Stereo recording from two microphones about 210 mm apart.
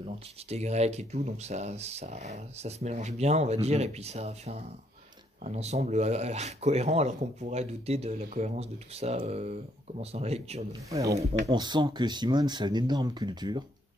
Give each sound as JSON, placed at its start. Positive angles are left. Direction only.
{"t": 0.0, "sound": "speech", "side_deg": -30}
{"t": 10.9, "sound": "speech", "side_deg": -15}